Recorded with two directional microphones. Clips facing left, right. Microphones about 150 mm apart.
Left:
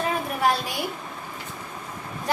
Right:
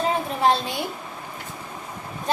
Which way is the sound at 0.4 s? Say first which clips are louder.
Right 3 dB; 25° right (ahead or behind).